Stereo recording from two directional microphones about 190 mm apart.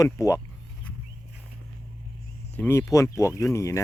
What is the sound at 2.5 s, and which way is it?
Speech, 15° left (ahead or behind).